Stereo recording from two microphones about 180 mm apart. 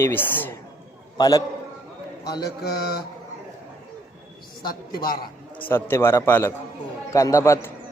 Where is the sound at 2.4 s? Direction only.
60° left (ahead or behind).